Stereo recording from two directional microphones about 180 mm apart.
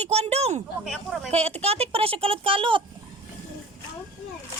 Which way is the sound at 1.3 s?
35° right (ahead or behind).